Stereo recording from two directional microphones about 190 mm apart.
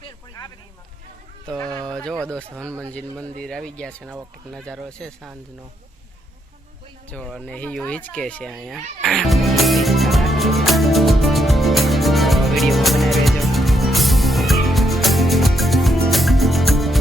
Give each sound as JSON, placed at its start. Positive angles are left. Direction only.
{"t": 0.0, "sound": "vehicle", "side_deg": 20}
{"t": 1.5, "sound": "speech", "side_deg": 5}
{"t": 7.1, "sound": "speech", "side_deg": 5}
{"t": 9.0, "sound": "music", "side_deg": 0}